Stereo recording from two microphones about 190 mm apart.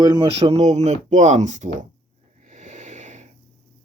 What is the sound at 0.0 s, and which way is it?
Speech, 20° right (ahead or behind).